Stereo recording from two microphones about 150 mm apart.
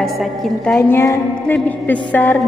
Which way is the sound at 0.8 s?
15° left (ahead or behind).